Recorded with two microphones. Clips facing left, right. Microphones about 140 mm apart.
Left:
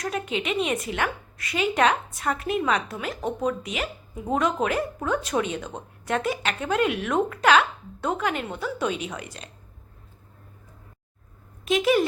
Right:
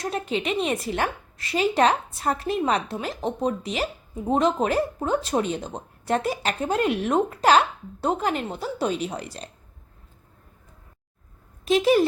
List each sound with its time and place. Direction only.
0.0 s a woman's voice: 35° right (ahead or behind)
11.6 s speech: 35° right (ahead or behind)